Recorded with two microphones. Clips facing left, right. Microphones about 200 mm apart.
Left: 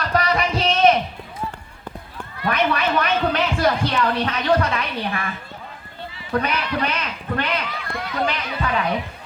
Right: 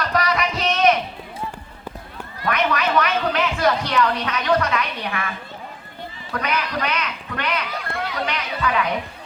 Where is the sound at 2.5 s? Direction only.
30° left (ahead or behind).